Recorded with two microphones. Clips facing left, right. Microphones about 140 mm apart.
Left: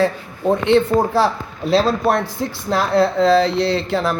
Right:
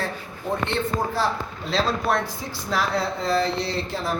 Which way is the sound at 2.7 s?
65° left (ahead or behind).